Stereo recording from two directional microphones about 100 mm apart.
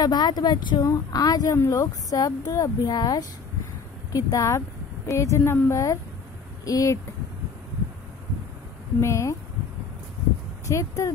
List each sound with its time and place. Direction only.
0.0 s speech: 45° left (ahead or behind)
9.0 s speech: 30° left (ahead or behind)
10.7 s speech: 30° left (ahead or behind)